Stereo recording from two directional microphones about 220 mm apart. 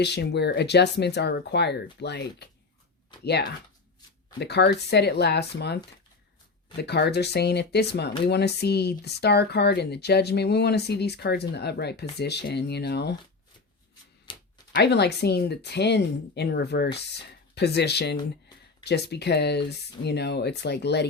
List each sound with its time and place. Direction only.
0.0 s speech: 50° left (ahead or behind)
6.8 s speech: 50° left (ahead or behind)
14.3 s a sound: 25° left (ahead or behind)
14.8 s speech: 50° left (ahead or behind)